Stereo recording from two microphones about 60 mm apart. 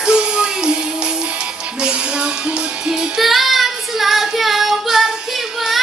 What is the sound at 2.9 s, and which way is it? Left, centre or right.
Child singing, centre.